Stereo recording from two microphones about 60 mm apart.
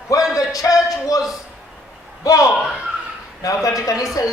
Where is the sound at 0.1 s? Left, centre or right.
Left.